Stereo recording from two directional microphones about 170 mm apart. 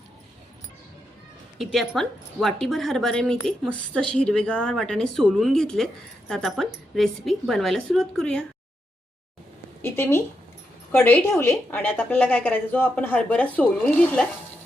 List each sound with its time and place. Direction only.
1.5 s speech: centre (ahead or behind)
9.8 s speech: 15° left (ahead or behind)